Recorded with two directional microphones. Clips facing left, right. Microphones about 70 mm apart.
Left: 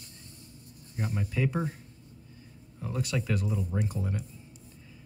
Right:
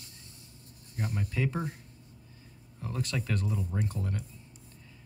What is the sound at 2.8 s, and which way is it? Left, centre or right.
Speech, centre.